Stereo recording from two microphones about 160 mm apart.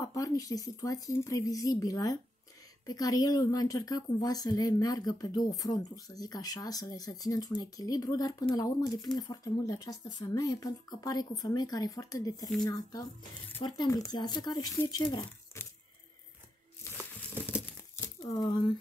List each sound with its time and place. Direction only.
0.0 s a woman's voice: 20° left (ahead or behind)
17.3 s crumpling: 10° right (ahead or behind)
18.0 s a sound: 25° left (ahead or behind)